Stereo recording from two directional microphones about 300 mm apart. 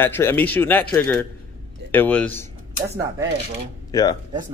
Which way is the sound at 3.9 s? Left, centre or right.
Centre.